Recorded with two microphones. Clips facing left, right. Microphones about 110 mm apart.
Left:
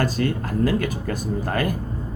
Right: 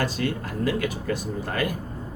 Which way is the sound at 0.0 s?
45° left (ahead or behind).